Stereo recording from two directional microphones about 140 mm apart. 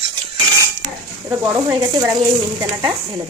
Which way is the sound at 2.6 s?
35° right (ahead or behind).